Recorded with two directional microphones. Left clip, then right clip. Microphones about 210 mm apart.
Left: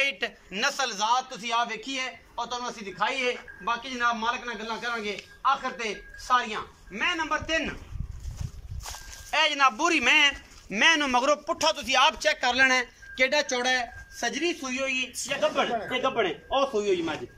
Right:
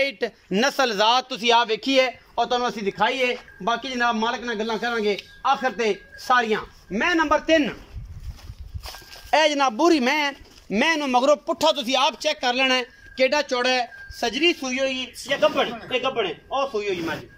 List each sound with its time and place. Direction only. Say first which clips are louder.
0.0 s a man's voice: right 3 dB; 25° right (ahead or behind)
9.3 s a man's voice: right 4 dB; 30° right (ahead or behind); by 16.6 s centre (ahead or behind)